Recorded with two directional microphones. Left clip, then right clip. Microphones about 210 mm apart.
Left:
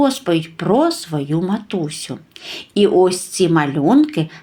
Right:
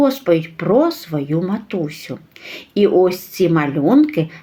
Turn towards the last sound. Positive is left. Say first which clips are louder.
# right 1 dB
turn(degrees=20)  # may be behind; listen again after turning